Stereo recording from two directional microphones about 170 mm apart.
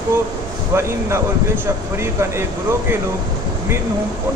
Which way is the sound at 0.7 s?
15° right (ahead or behind).